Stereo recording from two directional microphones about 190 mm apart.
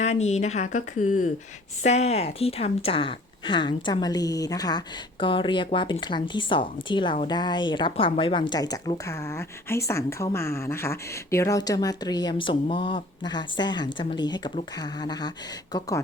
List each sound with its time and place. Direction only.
0.0 s a woman's voice: 35° left (ahead or behind); by 16.0 s 20° left (ahead or behind)